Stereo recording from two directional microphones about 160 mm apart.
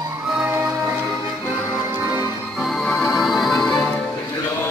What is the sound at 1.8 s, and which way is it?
Music, 15° right (ahead or behind).